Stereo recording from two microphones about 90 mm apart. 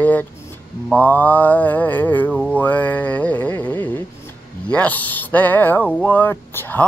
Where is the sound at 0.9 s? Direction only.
15° left (ahead or behind).